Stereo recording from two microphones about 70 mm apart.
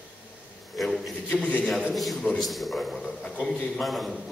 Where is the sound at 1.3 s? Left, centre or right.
Centre.